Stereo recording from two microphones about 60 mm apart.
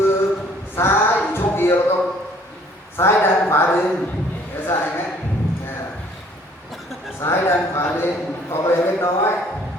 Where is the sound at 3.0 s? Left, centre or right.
Left.